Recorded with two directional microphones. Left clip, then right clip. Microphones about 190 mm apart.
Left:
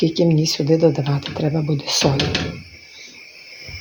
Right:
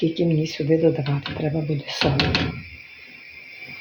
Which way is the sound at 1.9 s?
50° left (ahead or behind).